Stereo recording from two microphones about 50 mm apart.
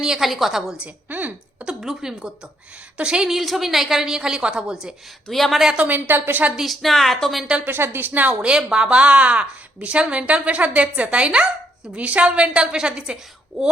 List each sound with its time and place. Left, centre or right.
0.0 s a woman's voice: centre
3.2 s a woman's voice: centre
5.3 s a woman's voice: centre
5.9 s a woman's voice: right
6.6 s a woman's voice: centre
7.6 s a woman's voice: right
8.4 s speech: centre